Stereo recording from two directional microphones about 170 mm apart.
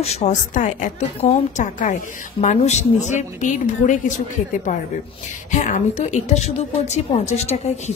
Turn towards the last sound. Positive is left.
turn(degrees=40)  # may be behind; listen again after turning